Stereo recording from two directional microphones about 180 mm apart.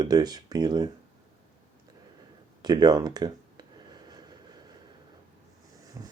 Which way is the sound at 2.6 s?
25° right (ahead or behind).